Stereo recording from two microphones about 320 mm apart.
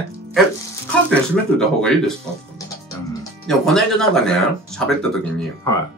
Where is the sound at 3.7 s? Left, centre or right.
Centre.